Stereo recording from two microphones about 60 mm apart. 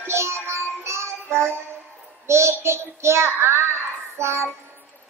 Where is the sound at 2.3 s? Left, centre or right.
Right.